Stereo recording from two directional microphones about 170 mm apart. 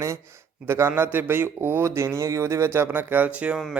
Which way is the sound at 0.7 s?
15° right (ahead or behind).